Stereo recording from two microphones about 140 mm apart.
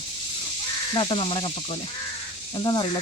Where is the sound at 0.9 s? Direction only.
35° left (ahead or behind).